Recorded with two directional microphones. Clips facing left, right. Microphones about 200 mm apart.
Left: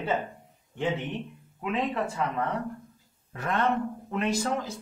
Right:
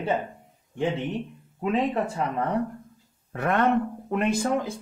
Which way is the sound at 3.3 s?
60° right (ahead or behind).